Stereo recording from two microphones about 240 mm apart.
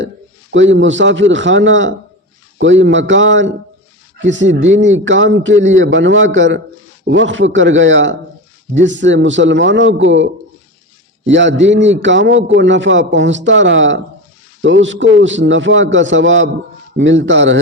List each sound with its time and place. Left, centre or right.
0.5 s a man's voice: right
11.3 s a man's voice: right